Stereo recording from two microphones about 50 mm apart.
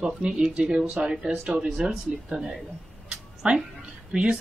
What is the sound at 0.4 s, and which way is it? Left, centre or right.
Speech, centre.